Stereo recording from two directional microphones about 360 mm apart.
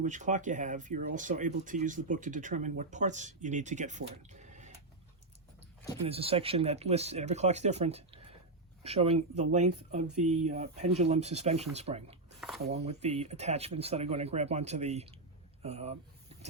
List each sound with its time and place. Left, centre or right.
0.0 s speech: right
6.0 s speech: centre